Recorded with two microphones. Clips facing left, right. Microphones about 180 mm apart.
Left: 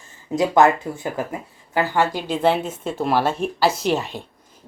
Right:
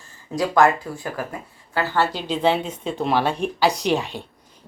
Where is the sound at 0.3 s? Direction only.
20° left (ahead or behind).